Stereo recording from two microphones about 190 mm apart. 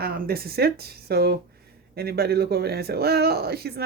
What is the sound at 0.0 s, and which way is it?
A man's voice, 55° right (ahead or behind).